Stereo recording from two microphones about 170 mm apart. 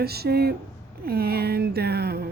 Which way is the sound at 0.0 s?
70° right (ahead or behind).